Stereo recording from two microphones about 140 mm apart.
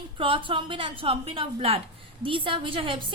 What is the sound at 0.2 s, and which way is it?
A woman's voice, 40° right (ahead or behind).